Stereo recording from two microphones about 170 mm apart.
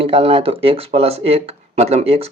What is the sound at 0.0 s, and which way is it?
Speech, 30° right (ahead or behind).